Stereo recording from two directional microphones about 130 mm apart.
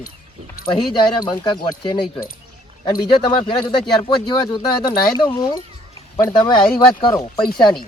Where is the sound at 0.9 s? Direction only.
35° left (ahead or behind).